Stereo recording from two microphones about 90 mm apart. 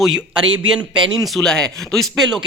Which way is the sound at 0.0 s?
10° right (ahead or behind).